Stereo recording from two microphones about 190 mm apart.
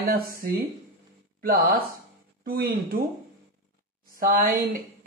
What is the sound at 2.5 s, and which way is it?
Speech, 55° right (ahead or behind).